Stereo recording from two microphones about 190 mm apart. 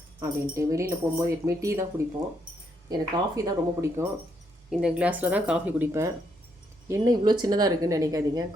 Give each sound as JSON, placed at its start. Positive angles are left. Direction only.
{"t": 0.2, "sound": "speech", "side_deg": -15}
{"t": 2.9, "sound": "speech", "side_deg": -20}
{"t": 4.7, "sound": "a woman's voice", "side_deg": -5}